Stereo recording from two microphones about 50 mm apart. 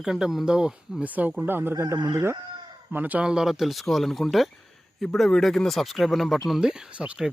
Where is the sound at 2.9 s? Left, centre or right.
Right.